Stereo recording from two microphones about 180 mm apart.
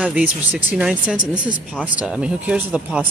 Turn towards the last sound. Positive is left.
turn(degrees=-5)  # may be behind; listen again after turning